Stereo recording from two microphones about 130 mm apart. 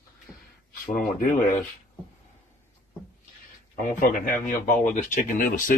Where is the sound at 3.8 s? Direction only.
85° left.